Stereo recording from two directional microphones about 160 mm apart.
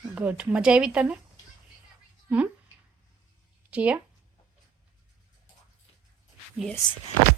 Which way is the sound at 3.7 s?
10° right (ahead or behind).